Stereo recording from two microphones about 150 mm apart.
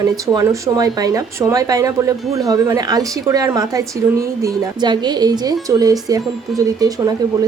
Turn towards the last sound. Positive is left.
turn(degrees=-25)  # may be behind; listen again after turning